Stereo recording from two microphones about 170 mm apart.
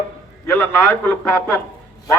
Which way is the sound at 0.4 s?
15° left (ahead or behind).